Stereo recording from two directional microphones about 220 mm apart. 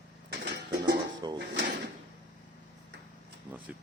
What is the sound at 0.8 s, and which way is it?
Music, 20° right (ahead or behind).